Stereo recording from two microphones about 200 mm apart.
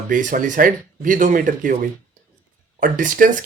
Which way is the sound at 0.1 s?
40° right (ahead or behind).